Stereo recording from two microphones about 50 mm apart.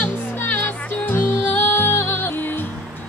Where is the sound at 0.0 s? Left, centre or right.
Left.